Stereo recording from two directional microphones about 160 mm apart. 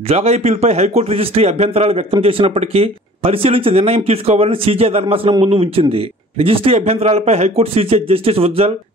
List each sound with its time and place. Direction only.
0.1 s a man's voice: 40° right (ahead or behind)